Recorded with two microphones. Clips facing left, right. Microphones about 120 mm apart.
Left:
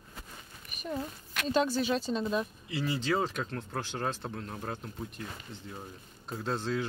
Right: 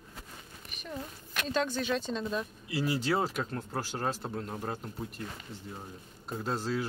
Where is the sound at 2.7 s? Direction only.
10° right (ahead or behind).